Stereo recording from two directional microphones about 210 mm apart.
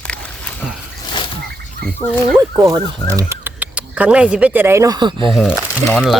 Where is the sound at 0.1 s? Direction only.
5° left (ahead or behind).